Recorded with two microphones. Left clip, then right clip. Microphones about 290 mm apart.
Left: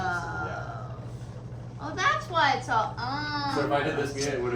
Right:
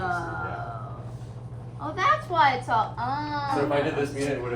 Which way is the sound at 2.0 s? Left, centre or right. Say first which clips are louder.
Right 3 dB; right.